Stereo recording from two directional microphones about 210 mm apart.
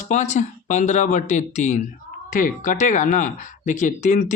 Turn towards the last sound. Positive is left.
turn(degrees=35)  # may be behind; listen again after turning